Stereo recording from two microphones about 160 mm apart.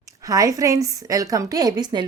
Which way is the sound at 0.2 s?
20° right (ahead or behind).